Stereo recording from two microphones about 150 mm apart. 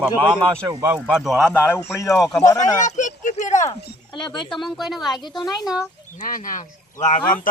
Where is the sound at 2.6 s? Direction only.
55° left (ahead or behind).